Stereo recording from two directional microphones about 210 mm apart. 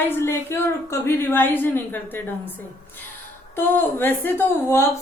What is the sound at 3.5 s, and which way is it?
Speech, 10° left (ahead or behind).